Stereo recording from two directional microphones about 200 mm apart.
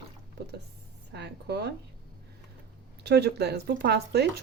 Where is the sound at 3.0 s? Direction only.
55° right (ahead or behind).